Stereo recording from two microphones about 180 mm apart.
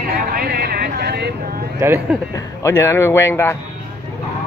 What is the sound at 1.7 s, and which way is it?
Speech, 15° right (ahead or behind).